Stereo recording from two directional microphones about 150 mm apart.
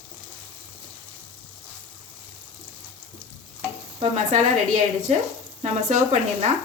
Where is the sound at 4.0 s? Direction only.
50° right (ahead or behind).